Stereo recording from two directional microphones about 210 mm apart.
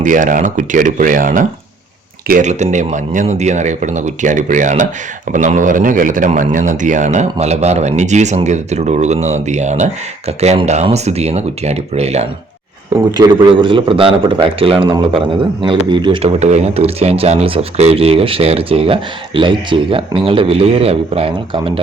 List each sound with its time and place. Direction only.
0.0 s a man's voice: 40° right (ahead or behind)